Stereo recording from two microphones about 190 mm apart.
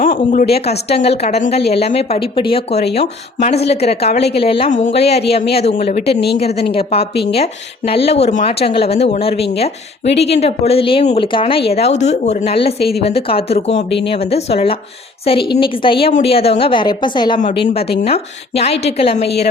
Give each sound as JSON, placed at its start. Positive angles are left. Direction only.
{"t": 0.0, "sound": "a woman's voice", "side_deg": 45}